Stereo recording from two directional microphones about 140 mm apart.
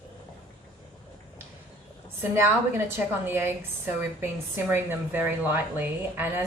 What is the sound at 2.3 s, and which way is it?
A woman's voice, 15° right (ahead or behind).